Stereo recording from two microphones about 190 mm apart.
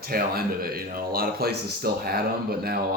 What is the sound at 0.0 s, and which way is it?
Speech, 50° right (ahead or behind).